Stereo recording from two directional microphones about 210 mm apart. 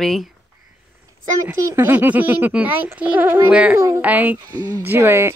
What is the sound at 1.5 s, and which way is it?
A child's voice, 15° right (ahead or behind).